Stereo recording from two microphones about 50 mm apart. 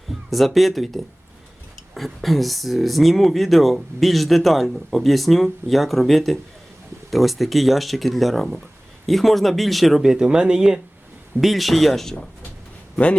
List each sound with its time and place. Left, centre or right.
0.3 s speech: centre
10.0 s speech: centre
11.3 s speech: centre